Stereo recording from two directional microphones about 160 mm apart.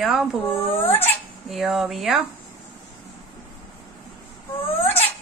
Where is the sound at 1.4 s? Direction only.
Centre (ahead or behind).